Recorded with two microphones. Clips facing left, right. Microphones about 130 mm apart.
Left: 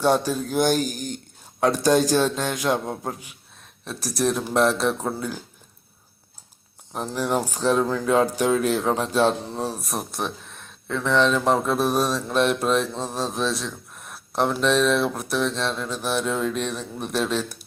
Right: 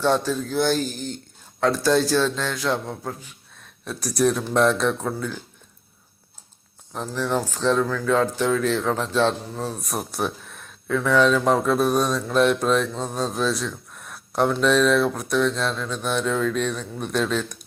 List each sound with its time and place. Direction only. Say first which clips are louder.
0.0 s speech: left 1 dB; 10° left (ahead or behind)
2.9 s a man's voice: left 2 dB; 25° left (ahead or behind)
3.8 s speech: right 3 dB; centre (ahead or behind)
6.9 s speech: even; 15° left (ahead or behind)
9.8 s speech: right 2 dB; centre (ahead or behind)